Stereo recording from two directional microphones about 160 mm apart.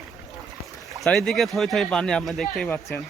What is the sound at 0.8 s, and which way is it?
Speech, centre (ahead or behind).